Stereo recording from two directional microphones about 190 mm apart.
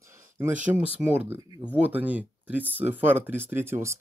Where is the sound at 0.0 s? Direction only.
15° right (ahead or behind).